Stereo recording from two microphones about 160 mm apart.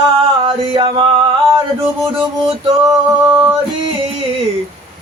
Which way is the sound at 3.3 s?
10° right (ahead or behind).